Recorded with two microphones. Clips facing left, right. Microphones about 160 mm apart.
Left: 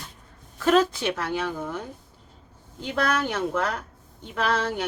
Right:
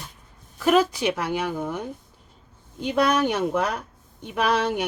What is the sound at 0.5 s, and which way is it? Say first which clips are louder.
A woman's voice: right 1 dB; 10° right (ahead or behind).